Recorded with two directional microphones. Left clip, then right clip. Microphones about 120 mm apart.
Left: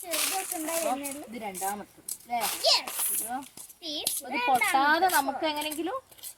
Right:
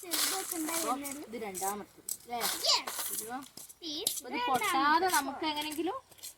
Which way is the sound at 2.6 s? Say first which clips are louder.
Left 5 dB; 90° left.